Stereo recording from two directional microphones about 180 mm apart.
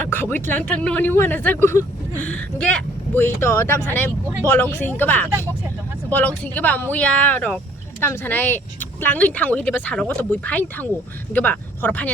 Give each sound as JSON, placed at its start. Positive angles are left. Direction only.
{"t": 0.0, "sound": "speech", "side_deg": 10}